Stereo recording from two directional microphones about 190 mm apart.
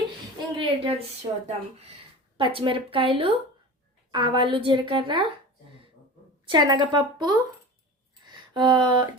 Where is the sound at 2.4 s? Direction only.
30° right (ahead or behind).